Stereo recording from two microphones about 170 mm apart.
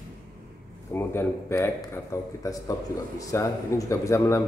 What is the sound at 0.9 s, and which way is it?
A man's voice, 15° left (ahead or behind).